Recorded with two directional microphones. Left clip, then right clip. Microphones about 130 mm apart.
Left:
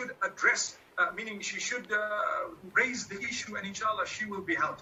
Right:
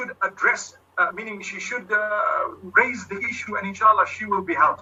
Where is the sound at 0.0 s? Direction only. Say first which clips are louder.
Right 6 dB; 35° right (ahead or behind).